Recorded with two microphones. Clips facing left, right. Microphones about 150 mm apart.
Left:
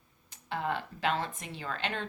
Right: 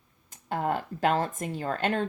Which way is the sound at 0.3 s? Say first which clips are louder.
Right 5 dB; 45° right (ahead or behind).